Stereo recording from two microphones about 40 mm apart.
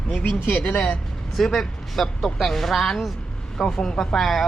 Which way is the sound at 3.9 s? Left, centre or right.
Centre.